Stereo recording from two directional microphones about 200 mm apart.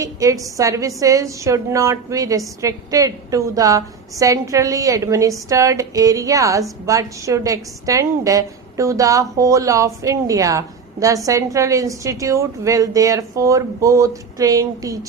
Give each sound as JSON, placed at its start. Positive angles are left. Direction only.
{"t": 0.0, "sound": "a woman's voice", "side_deg": -15}